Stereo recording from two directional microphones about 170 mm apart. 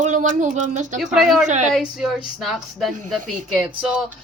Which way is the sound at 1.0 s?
Centre (ahead or behind).